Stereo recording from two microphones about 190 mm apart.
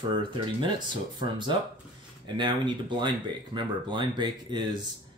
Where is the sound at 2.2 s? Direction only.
25° right (ahead or behind).